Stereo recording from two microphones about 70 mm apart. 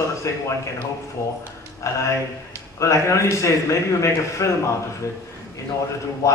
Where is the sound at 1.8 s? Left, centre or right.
Left.